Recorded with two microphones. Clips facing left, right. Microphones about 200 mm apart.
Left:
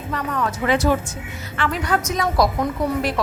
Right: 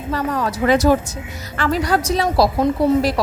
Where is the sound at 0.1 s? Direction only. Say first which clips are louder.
Right 3 dB; 35° right (ahead or behind).